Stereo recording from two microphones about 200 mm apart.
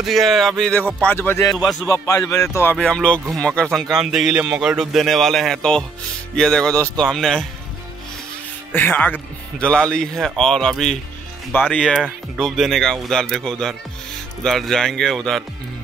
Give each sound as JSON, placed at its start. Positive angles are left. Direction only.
{"t": 0.0, "sound": "speech", "side_deg": 0}
{"t": 1.9, "sound": "speech", "side_deg": 15}
{"t": 8.7, "sound": "speech", "side_deg": 10}